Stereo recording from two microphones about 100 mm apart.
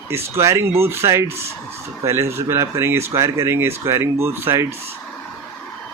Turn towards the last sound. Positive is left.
turn(degrees=-25)  # may be behind; listen again after turning